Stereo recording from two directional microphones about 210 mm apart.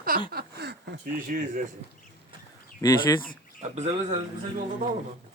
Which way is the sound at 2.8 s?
15° left (ahead or behind).